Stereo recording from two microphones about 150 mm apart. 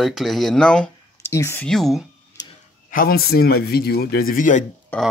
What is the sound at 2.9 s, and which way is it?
Speech, 85° left.